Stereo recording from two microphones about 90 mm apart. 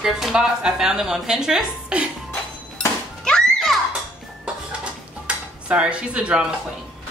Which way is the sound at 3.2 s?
5° left (ahead or behind).